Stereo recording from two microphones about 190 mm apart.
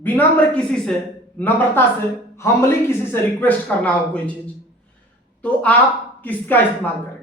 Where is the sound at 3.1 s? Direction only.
10° left (ahead or behind).